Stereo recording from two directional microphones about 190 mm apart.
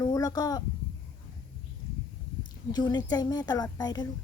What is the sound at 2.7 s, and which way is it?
Speech, 20° left (ahead or behind).